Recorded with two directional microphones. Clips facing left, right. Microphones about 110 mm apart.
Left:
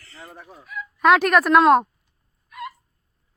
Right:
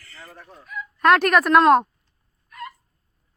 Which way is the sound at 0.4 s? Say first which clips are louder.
Right 1 dB; 5° left (ahead or behind).